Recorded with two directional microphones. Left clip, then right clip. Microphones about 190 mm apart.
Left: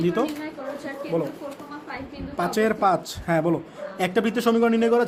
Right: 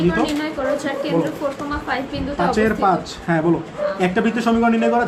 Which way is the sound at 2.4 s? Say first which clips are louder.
Right 4 dB; 60° left (ahead or behind).